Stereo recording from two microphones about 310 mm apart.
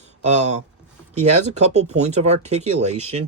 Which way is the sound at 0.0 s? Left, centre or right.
Right.